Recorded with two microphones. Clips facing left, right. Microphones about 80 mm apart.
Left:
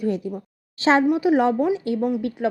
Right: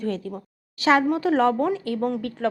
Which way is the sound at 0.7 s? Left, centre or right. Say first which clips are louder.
Left 1 dB; left.